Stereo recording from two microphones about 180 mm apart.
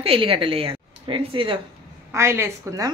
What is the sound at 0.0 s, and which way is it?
A woman's voice, 30° right (ahead or behind).